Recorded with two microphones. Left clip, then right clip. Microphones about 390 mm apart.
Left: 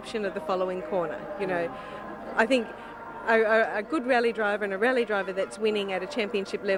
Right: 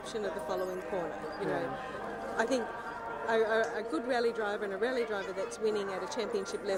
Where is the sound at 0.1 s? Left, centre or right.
Left.